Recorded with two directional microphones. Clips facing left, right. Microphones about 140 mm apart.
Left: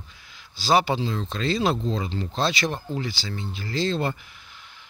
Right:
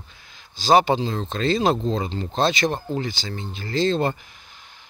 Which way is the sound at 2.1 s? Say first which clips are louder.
Right 1 dB; 25° right (ahead or behind).